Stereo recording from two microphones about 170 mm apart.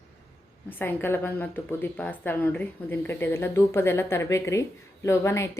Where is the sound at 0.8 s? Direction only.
10° left (ahead or behind).